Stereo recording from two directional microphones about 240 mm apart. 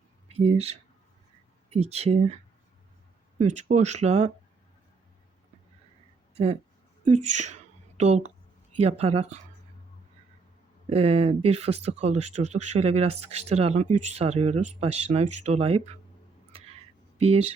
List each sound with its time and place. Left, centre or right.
0.3 s speech: right
6.3 s a woman's voice: right
10.8 s speech: right
16.5 s a sound: right
17.2 s speech: right